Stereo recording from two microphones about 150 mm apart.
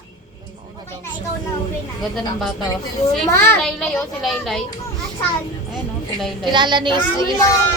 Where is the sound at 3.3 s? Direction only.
20° left (ahead or behind).